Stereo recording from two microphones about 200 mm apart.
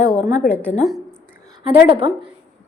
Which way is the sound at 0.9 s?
5° left (ahead or behind).